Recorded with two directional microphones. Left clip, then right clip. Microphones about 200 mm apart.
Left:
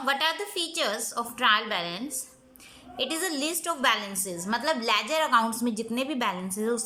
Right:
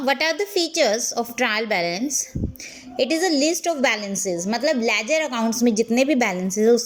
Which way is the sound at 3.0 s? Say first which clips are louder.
Right 10 dB; 20° right (ahead or behind).